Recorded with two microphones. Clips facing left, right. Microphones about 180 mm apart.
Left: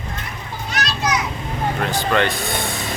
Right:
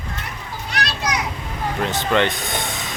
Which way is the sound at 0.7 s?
65° right (ahead or behind).